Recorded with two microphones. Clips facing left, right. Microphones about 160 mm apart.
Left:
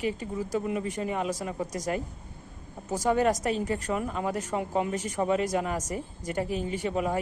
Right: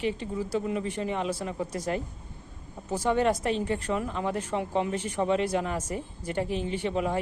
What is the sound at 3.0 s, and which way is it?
Speech, 40° left (ahead or behind).